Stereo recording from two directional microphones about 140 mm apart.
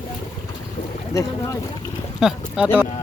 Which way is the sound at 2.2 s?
5° right (ahead or behind).